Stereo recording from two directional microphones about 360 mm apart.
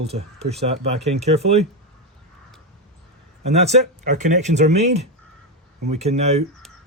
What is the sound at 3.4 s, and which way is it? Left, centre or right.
Speech, centre.